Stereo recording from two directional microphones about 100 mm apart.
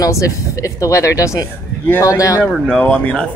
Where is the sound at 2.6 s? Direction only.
10° left (ahead or behind).